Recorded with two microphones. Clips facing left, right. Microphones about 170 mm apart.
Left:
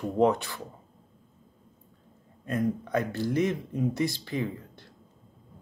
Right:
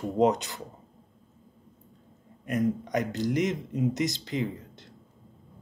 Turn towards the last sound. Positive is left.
turn(degrees=-20)  # may be behind; listen again after turning